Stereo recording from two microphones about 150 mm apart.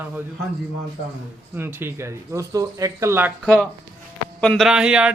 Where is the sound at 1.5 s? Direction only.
15° right (ahead or behind).